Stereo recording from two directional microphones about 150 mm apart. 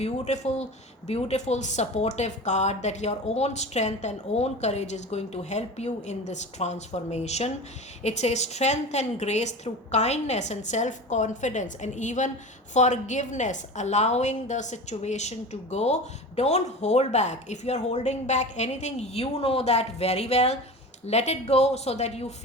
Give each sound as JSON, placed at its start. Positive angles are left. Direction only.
{"t": 0.0, "sound": "a woman's voice", "side_deg": 50}